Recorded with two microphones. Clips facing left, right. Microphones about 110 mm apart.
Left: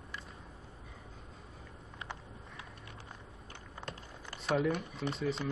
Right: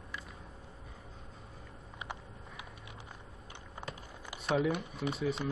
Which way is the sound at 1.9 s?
15° right (ahead or behind).